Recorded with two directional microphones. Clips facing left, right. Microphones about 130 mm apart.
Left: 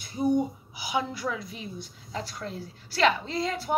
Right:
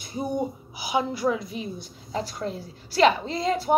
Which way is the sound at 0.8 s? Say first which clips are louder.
Right 5 dB; 15° right (ahead or behind).